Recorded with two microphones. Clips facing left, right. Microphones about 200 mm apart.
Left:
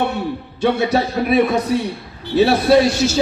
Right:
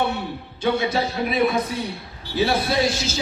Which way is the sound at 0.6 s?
70° left (ahead or behind).